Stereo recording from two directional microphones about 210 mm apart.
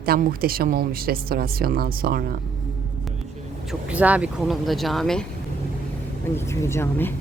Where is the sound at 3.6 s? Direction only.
5° right (ahead or behind).